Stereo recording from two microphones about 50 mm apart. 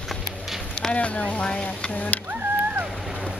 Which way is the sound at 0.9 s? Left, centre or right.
Left.